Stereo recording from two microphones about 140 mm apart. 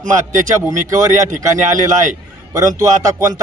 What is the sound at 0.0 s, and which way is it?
Speech, 65° right (ahead or behind).